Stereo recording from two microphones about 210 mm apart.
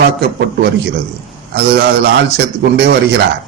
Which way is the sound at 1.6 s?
50° right (ahead or behind).